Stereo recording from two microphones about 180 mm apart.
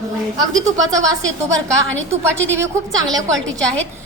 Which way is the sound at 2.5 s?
15° right (ahead or behind).